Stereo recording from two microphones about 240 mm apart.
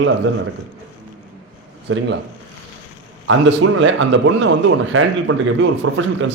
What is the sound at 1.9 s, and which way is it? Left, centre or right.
Speech, right.